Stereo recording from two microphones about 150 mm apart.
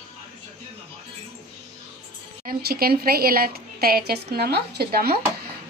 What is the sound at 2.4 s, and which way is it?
A woman's voice, 90° right.